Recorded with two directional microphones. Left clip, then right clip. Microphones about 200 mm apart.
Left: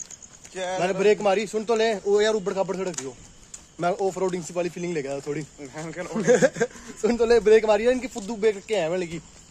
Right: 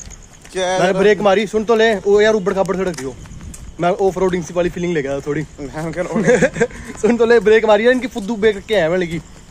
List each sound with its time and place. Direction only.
0.7 s speech: centre (ahead or behind)
5.6 s speech: 45° right (ahead or behind)
6.2 s speech: 5° left (ahead or behind)